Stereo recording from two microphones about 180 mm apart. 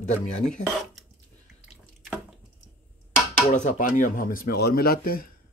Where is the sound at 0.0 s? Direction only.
40° left (ahead or behind).